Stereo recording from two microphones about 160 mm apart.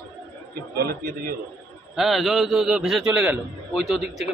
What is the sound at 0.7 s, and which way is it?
Speech, 70° right (ahead or behind).